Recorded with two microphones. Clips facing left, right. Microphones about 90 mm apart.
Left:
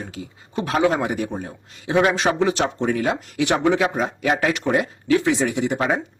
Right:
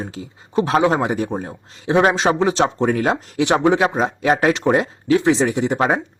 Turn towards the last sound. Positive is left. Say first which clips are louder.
# right 3 dB
turn(degrees=-35)  # may be behind; listen again after turning